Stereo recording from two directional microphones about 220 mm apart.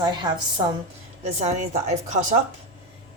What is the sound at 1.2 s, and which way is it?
A woman's voice, 30° right (ahead or behind).